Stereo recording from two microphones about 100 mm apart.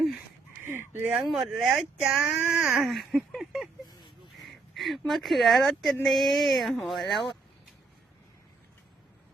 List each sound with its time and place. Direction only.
0.6 s fowl: 25° right (ahead or behind)
1.1 s speech: 5° right (ahead or behind)